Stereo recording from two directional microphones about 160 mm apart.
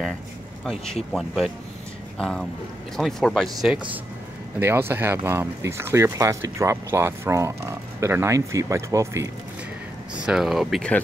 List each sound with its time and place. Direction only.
1.1 s speech: centre (ahead or behind)
4.6 s speech: 15° right (ahead or behind)
10.1 s speech: 5° right (ahead or behind)